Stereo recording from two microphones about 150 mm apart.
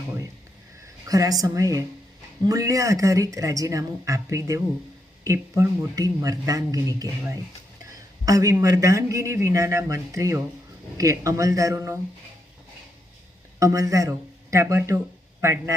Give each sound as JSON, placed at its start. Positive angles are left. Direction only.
{"t": 1.0, "sound": "a man's voice", "side_deg": -25}
{"t": 13.6, "sound": "speech", "side_deg": -20}